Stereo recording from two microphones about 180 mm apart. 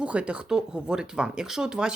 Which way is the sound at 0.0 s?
5° right (ahead or behind).